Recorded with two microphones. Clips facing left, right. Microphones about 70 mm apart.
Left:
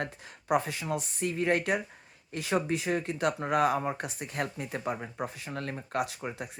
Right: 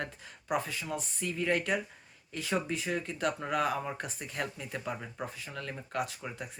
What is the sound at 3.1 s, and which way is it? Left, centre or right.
Speech, left.